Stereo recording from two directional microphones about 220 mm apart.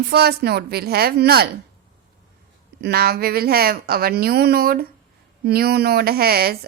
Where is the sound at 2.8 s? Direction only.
45° right (ahead or behind).